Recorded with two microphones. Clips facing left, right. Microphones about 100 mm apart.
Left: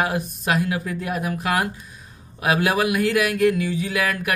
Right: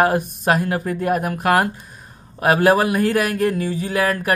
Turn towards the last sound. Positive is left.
turn(degrees=-40)  # may be behind; listen again after turning